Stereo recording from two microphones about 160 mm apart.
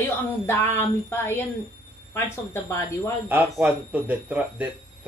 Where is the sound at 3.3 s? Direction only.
10° right (ahead or behind).